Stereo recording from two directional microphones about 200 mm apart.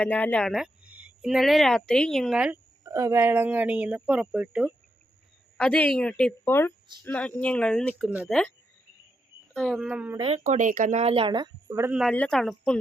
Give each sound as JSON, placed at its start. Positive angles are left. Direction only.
{"t": 0.0, "sound": "a woman's voice", "side_deg": 5}
{"t": 5.5, "sound": "a woman's voice", "side_deg": 5}
{"t": 10.2, "sound": "speech", "side_deg": -30}
{"t": 11.9, "sound": "a woman's voice", "side_deg": -5}